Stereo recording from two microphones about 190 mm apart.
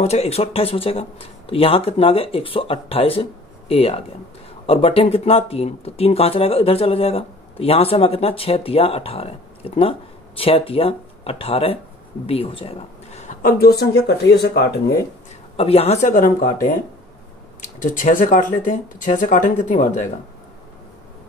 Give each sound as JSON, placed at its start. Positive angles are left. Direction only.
{"t": 0.0, "sound": "speech", "side_deg": 35}
{"t": 15.5, "sound": "speech", "side_deg": 30}